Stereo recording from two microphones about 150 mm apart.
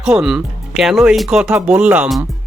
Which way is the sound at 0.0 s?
5° right (ahead or behind).